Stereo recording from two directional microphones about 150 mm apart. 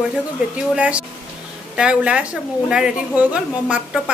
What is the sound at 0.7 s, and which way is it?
A woman's voice, 10° right (ahead or behind).